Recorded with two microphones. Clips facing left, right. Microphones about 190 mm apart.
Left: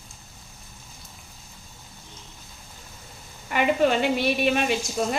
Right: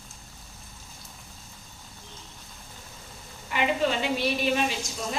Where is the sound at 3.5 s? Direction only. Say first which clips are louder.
Left 5 dB; 55° left (ahead or behind).